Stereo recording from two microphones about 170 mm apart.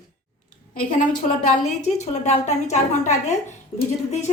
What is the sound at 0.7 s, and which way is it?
Speech, 55° left (ahead or behind).